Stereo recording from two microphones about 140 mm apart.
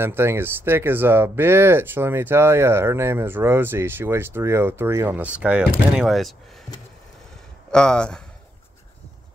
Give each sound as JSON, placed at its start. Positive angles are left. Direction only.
{"t": 0.0, "sound": "speech", "side_deg": -15}
{"t": 7.7, "sound": "speech", "side_deg": 5}